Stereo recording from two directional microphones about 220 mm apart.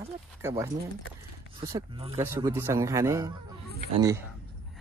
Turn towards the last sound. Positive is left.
turn(degrees=-15)  # may be behind; listen again after turning